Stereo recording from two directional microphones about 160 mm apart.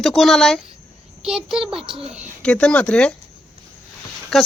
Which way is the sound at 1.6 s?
35° right (ahead or behind).